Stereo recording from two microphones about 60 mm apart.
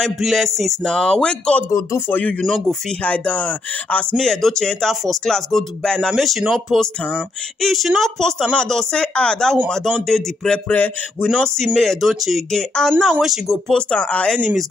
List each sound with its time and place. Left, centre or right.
0.2 s speech: centre
0.8 s speech: centre
1.7 s speech: left
2.0 s speech: left
3.0 s speech: left
4.2 s speech: centre
6.1 s speech: centre
10.7 s speech: left
11.3 s speech: centre
12.4 s speech: centre
13.2 s speech: centre
13.7 s speech: centre